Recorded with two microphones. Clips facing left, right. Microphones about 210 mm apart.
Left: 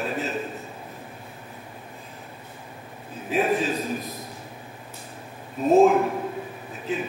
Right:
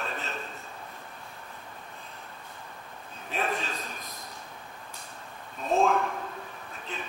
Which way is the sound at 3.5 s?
5° left (ahead or behind).